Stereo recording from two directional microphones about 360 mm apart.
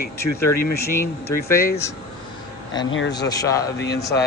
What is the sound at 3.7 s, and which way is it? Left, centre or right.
Speech, left.